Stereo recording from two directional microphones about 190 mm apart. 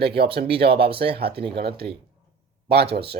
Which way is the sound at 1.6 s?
55° right (ahead or behind).